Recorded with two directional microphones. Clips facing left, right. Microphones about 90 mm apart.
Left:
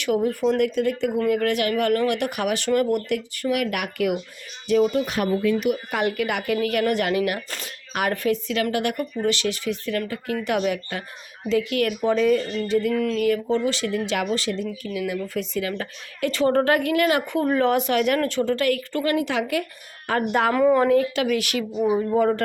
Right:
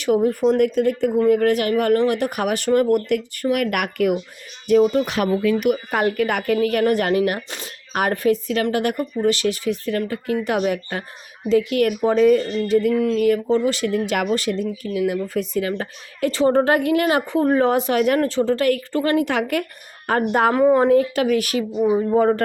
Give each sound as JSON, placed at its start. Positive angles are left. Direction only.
{"t": 0.0, "sound": "speech", "side_deg": -40}
{"t": 4.8, "sound": "speech", "side_deg": -35}
{"t": 5.0, "sound": "speech", "side_deg": -80}
{"t": 13.0, "sound": "speech", "side_deg": -25}
{"t": 13.2, "sound": "speech", "side_deg": -40}
{"t": 14.9, "sound": "speech", "side_deg": -35}
{"t": 19.2, "sound": "speech", "side_deg": -50}
{"t": 20.1, "sound": "speech", "side_deg": -40}
{"t": 20.5, "sound": "speech", "side_deg": -25}